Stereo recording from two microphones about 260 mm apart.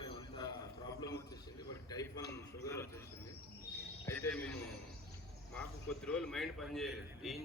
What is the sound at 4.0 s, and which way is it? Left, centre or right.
Cricket, centre.